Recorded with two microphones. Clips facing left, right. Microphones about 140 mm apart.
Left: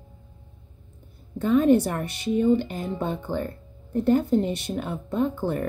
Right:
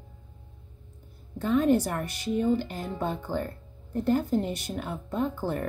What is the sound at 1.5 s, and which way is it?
Speech, 20° left (ahead or behind).